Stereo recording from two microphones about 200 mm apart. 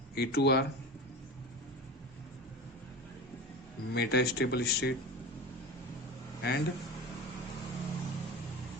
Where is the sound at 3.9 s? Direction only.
55° left (ahead or behind).